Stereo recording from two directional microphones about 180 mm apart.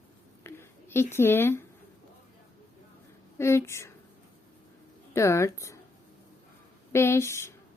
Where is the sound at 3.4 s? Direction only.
15° left (ahead or behind).